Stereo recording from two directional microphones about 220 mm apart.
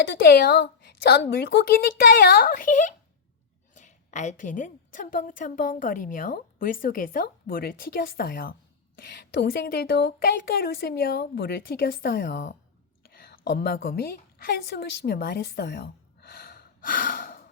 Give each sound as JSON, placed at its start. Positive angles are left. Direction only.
{"t": 0.1, "sound": "a woman's voice", "side_deg": 45}